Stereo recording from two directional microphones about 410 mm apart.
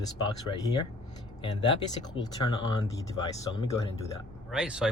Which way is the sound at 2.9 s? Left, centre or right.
Centre.